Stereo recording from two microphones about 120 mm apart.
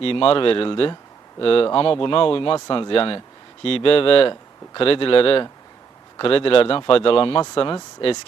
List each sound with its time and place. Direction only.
0.0 s speech: 50° left (ahead or behind)